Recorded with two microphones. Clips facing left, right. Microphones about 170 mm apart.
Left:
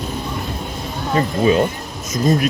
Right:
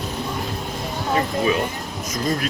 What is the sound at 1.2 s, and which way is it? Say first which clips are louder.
Speech: left 6 dB; 30° left (ahead or behind).